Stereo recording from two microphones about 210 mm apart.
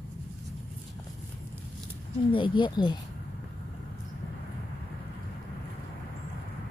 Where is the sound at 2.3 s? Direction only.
25° left (ahead or behind).